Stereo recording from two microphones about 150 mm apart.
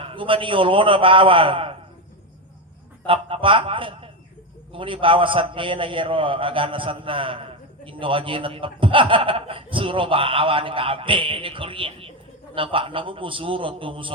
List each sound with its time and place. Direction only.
0.0 s a man's voice: 35° right (ahead or behind)
3.1 s a man's voice: 35° right (ahead or behind)